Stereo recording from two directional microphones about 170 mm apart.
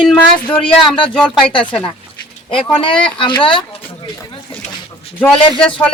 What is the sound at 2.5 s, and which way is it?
Speech, 30° left (ahead or behind).